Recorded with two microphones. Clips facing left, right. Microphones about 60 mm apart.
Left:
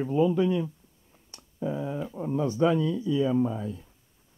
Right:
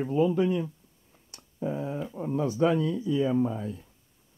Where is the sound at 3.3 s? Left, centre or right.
Centre.